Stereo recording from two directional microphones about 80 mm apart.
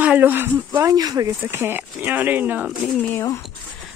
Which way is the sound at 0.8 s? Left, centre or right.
Right.